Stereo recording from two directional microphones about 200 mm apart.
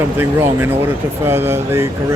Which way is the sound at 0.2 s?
10° right (ahead or behind).